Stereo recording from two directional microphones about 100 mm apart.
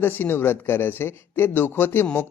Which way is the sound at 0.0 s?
20° left (ahead or behind).